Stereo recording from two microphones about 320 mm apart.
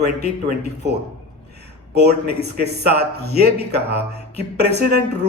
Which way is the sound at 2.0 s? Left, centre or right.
Right.